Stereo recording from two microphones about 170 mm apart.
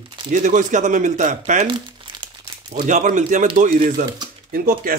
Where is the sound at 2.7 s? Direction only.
45° right (ahead or behind).